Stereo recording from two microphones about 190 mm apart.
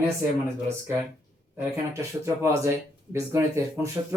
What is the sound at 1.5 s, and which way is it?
Speech, 15° right (ahead or behind).